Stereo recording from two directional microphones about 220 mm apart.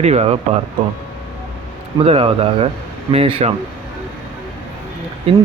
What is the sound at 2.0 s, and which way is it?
Speech, 25° right (ahead or behind).